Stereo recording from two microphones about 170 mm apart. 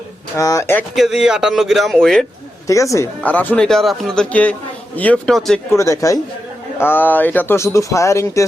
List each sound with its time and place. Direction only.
0.3 s speech: 20° left (ahead or behind)
0.9 s speech: centre (ahead or behind)
2.6 s speech: 20° left (ahead or behind); by 5.5 s centre (ahead or behind)
5.7 s speech: 15° left (ahead or behind)